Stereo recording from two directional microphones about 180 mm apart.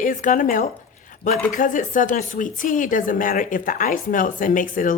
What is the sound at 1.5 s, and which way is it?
Speech, 45° left (ahead or behind).